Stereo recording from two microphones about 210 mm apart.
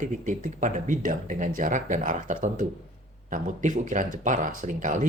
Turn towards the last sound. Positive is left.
turn(degrees=-40)  # may be behind; listen again after turning